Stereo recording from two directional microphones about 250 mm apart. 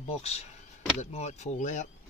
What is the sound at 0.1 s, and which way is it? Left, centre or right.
Speech, left.